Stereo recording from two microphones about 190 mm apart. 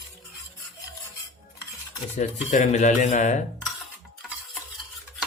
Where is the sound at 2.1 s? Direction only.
40° left (ahead or behind).